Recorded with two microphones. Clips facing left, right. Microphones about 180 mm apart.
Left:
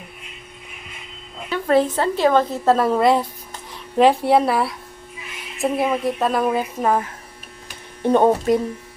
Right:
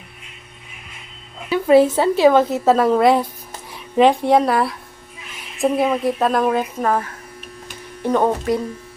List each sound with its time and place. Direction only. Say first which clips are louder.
1.5 s a woman's voice: right 5 dB; 10° right (ahead or behind)
6.8 s speech: even; 15° left (ahead or behind)